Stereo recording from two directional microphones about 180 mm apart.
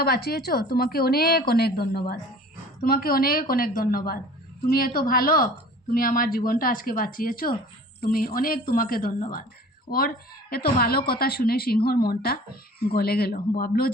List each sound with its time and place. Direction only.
0.0 s a woman's voice: 60° left (ahead or behind)